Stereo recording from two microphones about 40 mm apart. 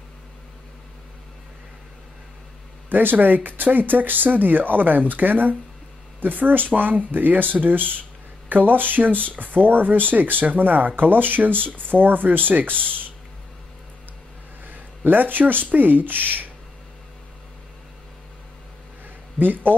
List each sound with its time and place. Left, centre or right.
2.9 s speech: right
14.7 s speech: right
19.3 s a man's voice: right